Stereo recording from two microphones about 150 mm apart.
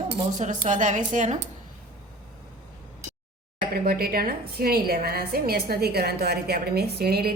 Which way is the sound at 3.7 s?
90° right.